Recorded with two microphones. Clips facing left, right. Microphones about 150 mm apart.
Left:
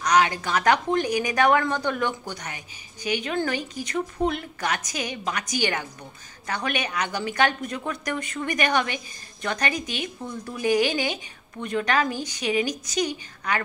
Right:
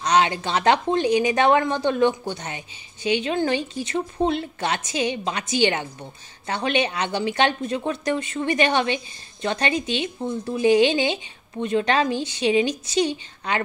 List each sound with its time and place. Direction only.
0.0 s a woman's voice: 25° right (ahead or behind)